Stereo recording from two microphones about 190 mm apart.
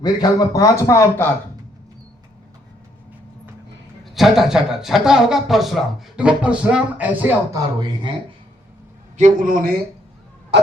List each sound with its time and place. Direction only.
0.0 s speech: 20° left (ahead or behind)
4.1 s a man's voice: centre (ahead or behind)
9.1 s a man's voice: 40° right (ahead or behind)